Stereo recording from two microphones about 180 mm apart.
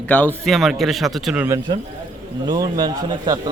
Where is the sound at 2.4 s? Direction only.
20° right (ahead or behind).